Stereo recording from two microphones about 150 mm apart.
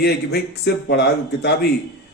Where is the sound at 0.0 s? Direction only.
90° left.